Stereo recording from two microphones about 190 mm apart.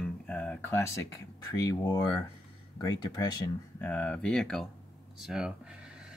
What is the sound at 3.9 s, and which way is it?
Speech, 5° left (ahead or behind).